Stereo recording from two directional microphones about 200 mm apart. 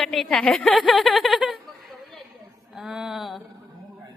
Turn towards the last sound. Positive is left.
turn(degrees=0)  # may be behind; listen again after turning